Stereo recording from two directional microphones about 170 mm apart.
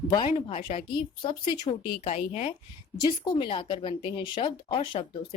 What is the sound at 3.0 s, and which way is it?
Speech, 25° left (ahead or behind).